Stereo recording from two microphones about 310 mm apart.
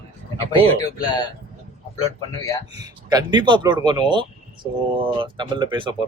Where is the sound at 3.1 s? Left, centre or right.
Centre.